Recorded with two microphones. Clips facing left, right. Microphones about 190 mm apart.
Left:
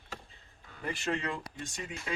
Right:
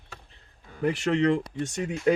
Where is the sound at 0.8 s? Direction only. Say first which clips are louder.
Right 11 dB; 75° right (ahead or behind).